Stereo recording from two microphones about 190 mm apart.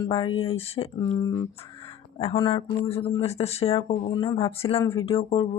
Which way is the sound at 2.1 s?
30° left (ahead or behind).